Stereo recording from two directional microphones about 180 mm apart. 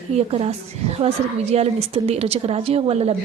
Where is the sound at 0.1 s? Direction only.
35° right (ahead or behind).